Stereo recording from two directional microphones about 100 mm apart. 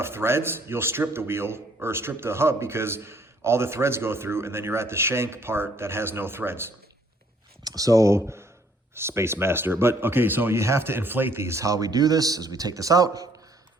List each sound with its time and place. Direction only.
0.0 s a man's voice: 25° right (ahead or behind)
7.6 s a man's voice: 35° right (ahead or behind)